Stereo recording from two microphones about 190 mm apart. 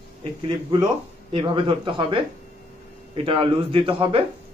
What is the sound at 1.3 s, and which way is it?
A man's voice, 25° right (ahead or behind).